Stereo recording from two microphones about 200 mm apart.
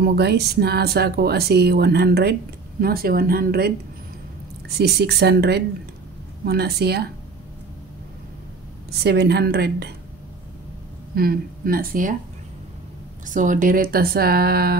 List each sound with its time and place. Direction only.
0.0 s speech: 55° right (ahead or behind)
8.9 s speech: 55° right (ahead or behind)
11.1 s speech: 45° right (ahead or behind)
13.3 s speech: 40° right (ahead or behind)